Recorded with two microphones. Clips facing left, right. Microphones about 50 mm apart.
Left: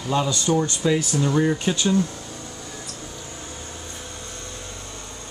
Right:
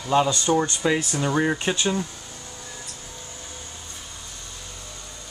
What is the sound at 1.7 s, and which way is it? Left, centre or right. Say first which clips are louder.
Speech: left 3 dB; centre.